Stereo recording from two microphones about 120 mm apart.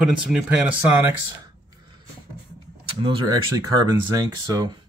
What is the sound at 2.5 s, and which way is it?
Speech, 45° right (ahead or behind).